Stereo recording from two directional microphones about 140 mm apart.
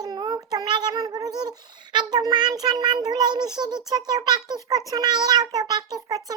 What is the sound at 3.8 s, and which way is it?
A child's voice, 30° right (ahead or behind).